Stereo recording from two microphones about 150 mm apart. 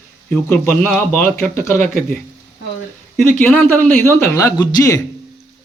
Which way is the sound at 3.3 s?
15° left (ahead or behind).